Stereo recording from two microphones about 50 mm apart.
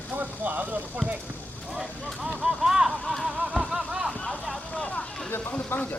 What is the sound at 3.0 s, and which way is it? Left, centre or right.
Music, centre.